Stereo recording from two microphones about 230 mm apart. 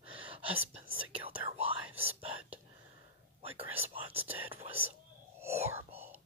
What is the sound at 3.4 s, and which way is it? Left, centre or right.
Whispering, right.